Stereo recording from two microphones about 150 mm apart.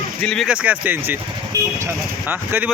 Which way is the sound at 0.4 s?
10° right (ahead or behind).